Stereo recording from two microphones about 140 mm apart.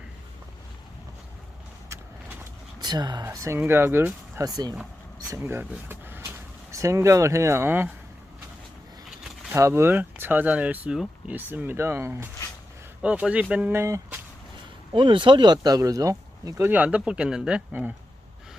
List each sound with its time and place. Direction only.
2.8 s speech: 30° right (ahead or behind)
5.4 s speech: 15° right (ahead or behind)
9.0 s a sound: 5° right (ahead or behind)
9.6 s speech: 20° right (ahead or behind)
14.9 s speech: 35° right (ahead or behind); by 17.9 s 10° right (ahead or behind)